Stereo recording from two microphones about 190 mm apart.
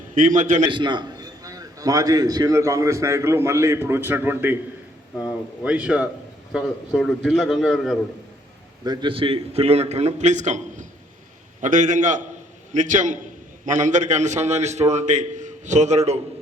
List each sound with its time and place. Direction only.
0.1 s a man's voice: 40° right (ahead or behind)
0.7 s a man's voice: 25° right (ahead or behind); by 7.9 s centre (ahead or behind)
8.8 s a man's voice: 20° right (ahead or behind)